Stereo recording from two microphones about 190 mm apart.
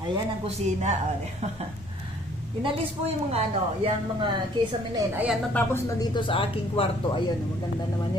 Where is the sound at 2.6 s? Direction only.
30° right (ahead or behind).